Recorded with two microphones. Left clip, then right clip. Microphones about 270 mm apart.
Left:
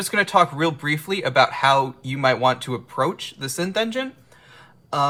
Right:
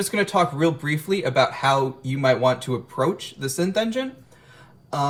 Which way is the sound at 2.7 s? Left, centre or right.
Left.